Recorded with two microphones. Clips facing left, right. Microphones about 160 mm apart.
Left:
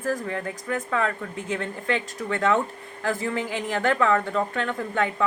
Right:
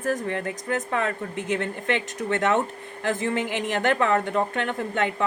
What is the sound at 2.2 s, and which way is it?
Speech, 20° right (ahead or behind).